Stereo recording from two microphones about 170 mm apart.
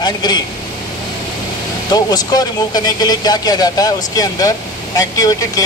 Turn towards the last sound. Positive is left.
turn(degrees=20)  # may be behind; listen again after turning